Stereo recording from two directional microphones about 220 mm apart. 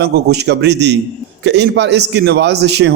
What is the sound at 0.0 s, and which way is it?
A man's voice, 50° right (ahead or behind).